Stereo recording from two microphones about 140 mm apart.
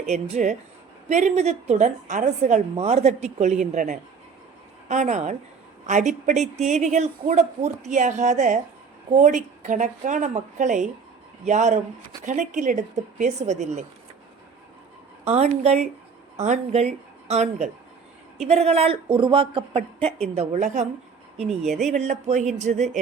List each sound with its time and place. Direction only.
0.1 s a woman's voice: 55° right (ahead or behind)
15.3 s a woman's voice: 50° right (ahead or behind)
21.7 s speech: centre (ahead or behind)
21.9 s a woman's voice: 55° right (ahead or behind)